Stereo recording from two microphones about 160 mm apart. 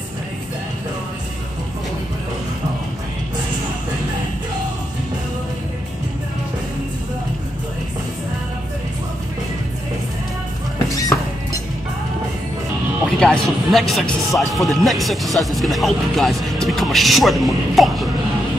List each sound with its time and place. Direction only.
10.9 s music: 20° left (ahead or behind)
13.2 s speech: centre (ahead or behind)